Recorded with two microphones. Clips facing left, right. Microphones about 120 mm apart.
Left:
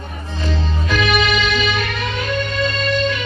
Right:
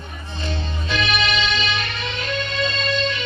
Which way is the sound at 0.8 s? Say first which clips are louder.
Left 5 dB; 45° left (ahead or behind).